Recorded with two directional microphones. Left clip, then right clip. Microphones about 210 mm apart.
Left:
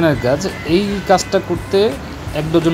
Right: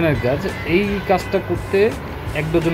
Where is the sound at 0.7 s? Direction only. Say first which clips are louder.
Left 4 dB; 15° left (ahead or behind).